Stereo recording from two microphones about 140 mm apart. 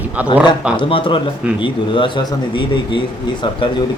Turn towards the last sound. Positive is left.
turn(degrees=35)  # may be behind; listen again after turning